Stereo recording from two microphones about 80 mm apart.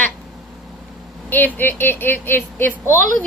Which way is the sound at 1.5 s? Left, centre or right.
Left.